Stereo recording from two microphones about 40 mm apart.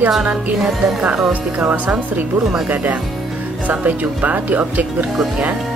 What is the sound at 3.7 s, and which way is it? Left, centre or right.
Speech, right.